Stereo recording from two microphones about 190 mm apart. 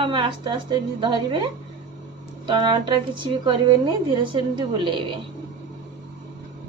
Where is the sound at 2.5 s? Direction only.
25° right (ahead or behind).